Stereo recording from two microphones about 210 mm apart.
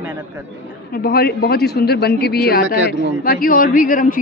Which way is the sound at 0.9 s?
45° left (ahead or behind).